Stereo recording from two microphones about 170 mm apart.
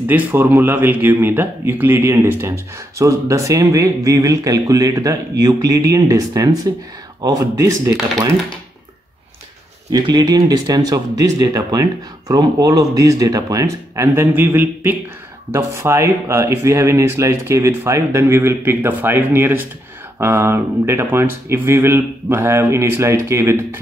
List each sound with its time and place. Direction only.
0.1 s speech: 10° right (ahead or behind)
9.8 s speech: 25° right (ahead or behind)